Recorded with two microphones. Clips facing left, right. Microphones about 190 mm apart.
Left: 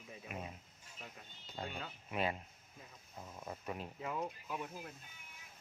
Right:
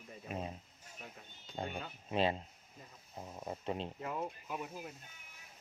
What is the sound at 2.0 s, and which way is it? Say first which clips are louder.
Speech: right 5 dB; 30° right (ahead or behind).